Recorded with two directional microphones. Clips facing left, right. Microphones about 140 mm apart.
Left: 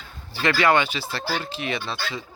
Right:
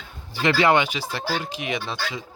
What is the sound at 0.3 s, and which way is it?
Speech, 20° right (ahead or behind).